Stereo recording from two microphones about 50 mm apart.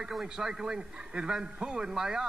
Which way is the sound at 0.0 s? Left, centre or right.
Centre.